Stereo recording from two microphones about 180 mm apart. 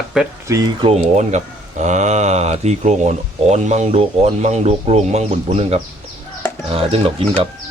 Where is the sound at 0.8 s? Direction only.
40° right (ahead or behind).